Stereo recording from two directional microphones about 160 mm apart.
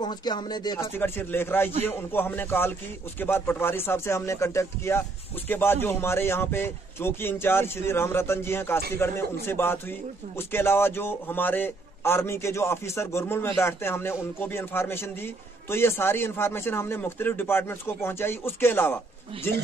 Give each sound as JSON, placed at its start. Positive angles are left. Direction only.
{"t": 0.0, "sound": "speech", "side_deg": 25}
{"t": 0.9, "sound": "a man's voice", "side_deg": 15}
{"t": 19.3, "sound": "speech", "side_deg": -35}